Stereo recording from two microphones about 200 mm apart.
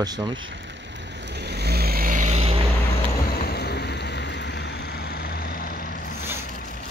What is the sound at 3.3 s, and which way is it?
Vehicle, 50° left (ahead or behind).